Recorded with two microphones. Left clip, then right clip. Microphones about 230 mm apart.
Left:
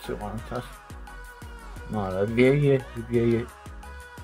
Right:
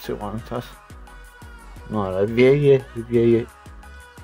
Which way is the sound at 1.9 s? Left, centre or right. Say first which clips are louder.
Right 5 dB; right.